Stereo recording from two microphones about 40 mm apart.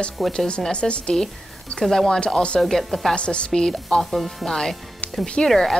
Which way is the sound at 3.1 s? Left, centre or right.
Left.